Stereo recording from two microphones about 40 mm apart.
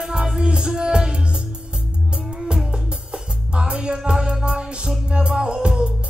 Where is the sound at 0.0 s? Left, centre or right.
Centre.